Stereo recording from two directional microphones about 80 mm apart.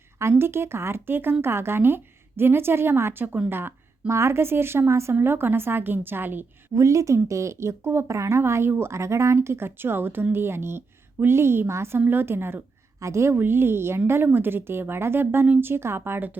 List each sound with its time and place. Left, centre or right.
0.2 s a woman's voice: right
6.7 s a woman's voice: right